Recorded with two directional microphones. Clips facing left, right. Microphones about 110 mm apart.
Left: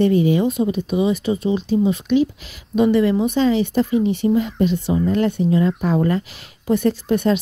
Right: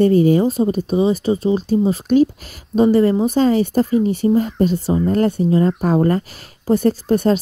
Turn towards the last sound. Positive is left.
turn(degrees=-40)  # may be behind; listen again after turning